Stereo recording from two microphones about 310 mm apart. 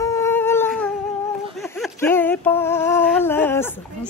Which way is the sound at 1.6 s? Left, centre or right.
Centre.